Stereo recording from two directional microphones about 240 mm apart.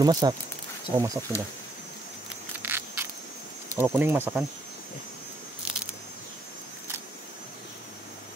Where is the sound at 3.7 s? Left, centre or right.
Centre.